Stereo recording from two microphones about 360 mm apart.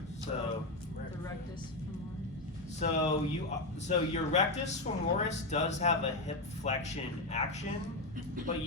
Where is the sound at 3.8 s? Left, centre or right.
Centre.